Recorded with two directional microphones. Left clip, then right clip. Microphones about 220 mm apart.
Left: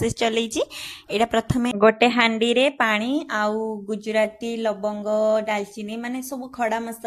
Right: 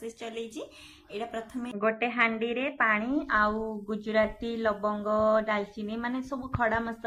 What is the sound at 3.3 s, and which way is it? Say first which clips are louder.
Speech: left 1 dB; 35° left (ahead or behind).